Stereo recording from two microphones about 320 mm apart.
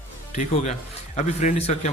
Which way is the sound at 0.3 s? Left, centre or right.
Left.